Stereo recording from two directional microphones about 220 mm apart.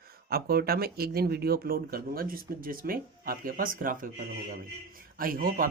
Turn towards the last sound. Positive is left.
turn(degrees=-40)  # may be behind; listen again after turning